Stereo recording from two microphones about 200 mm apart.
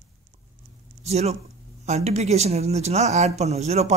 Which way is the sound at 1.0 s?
35° right (ahead or behind).